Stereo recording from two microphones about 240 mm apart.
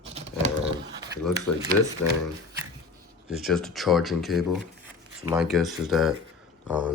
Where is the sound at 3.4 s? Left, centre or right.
Centre.